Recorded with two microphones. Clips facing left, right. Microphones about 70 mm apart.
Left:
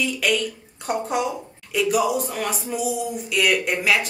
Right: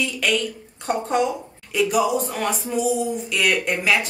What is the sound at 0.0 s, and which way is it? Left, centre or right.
Speech, centre.